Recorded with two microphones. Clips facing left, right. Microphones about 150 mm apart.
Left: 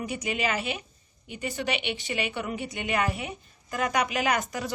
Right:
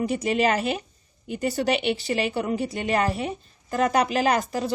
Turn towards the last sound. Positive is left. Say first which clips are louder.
# right 5 dB
turn(degrees=-30)  # may be behind; listen again after turning